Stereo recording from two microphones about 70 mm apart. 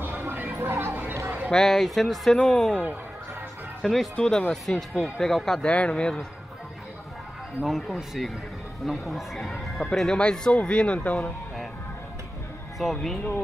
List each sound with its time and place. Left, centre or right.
0.0 s a sound: right
1.5 s speech: centre
3.8 s speech: centre
4.9 s speech: centre
5.2 s speech: centre
5.7 s speech: centre
7.6 s speech: centre; by 11.3 s left
12.7 s speech: centre